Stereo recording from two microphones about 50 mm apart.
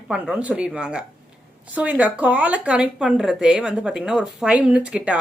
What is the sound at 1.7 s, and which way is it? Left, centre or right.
Speech, right.